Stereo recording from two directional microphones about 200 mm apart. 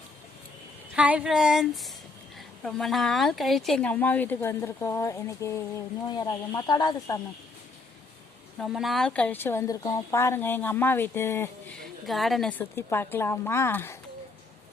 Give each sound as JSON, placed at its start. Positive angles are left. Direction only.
{"t": 0.9, "sound": "a sound", "side_deg": -5}
{"t": 2.6, "sound": "speech", "side_deg": 0}
{"t": 8.5, "sound": "speech", "side_deg": 0}
{"t": 12.0, "sound": "speech", "side_deg": 0}